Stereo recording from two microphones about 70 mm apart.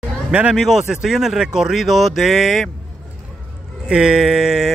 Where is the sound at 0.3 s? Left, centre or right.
Centre.